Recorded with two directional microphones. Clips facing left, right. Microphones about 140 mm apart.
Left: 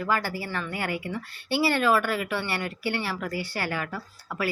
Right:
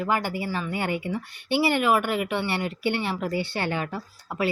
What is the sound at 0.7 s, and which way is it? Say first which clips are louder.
A woman's voice: right 3 dB; 25° right (ahead or behind).